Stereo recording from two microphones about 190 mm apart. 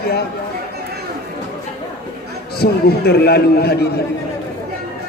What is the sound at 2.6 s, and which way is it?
Speech, 55° left (ahead or behind).